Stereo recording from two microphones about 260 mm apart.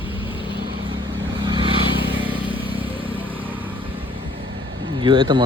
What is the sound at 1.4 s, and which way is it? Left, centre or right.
Vehicle, centre.